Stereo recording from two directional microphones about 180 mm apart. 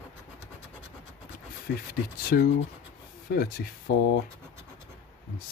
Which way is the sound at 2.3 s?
60° left (ahead or behind).